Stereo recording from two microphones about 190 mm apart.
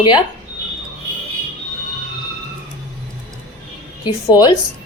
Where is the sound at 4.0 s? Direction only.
25° left (ahead or behind).